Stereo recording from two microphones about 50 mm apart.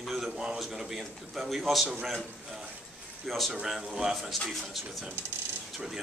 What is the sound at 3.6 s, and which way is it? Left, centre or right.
A man's voice, centre.